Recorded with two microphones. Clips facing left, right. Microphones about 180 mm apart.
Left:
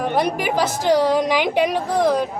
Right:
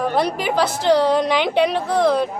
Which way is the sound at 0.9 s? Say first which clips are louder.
Right 1 dB; 10° left (ahead or behind).